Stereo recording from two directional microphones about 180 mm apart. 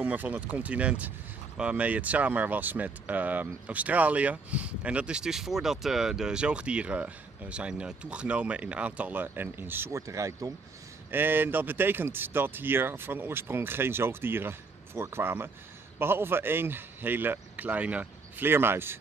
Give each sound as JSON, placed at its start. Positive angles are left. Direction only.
{"t": 0.0, "sound": "speech", "side_deg": -10}